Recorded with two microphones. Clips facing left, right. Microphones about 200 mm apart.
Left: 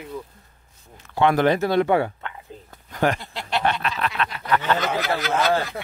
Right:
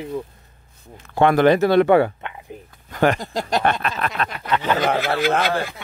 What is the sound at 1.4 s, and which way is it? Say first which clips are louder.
Speech: right 5 dB; 70° right (ahead or behind).